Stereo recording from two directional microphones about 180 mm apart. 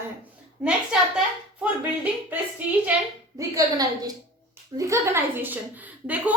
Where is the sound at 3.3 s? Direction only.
20° right (ahead or behind).